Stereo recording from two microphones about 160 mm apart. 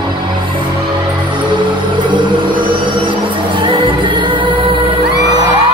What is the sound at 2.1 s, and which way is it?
Music, 30° right (ahead or behind).